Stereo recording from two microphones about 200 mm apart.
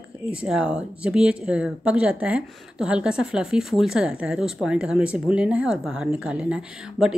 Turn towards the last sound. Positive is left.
turn(degrees=-5)  # may be behind; listen again after turning